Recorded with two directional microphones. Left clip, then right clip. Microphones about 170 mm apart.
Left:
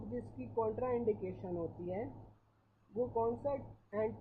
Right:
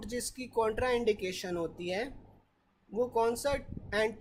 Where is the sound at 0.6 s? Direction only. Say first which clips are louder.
Right 6 dB; 30° right (ahead or behind).